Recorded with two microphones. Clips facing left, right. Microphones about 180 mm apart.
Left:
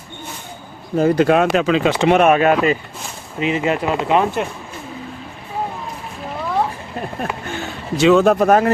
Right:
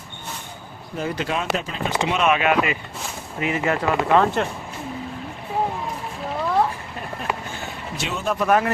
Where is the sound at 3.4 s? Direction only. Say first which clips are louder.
Left 4 dB; 20° left (ahead or behind).